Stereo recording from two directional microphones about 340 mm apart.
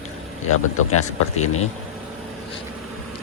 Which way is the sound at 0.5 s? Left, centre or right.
Left.